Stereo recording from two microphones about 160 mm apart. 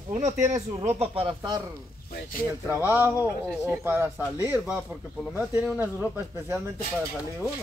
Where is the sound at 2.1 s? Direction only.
65° left (ahead or behind).